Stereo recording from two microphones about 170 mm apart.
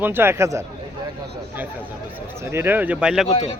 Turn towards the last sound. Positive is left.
turn(degrees=40)  # may be behind; listen again after turning